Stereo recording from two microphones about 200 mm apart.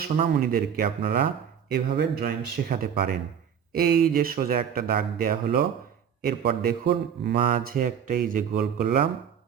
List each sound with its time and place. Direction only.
0.0 s a man's voice: 45° right (ahead or behind)